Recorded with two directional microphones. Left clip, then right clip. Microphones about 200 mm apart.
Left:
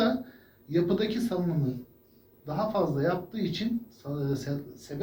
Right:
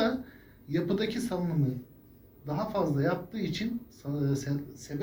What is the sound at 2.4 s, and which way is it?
Speech, 30° right (ahead or behind).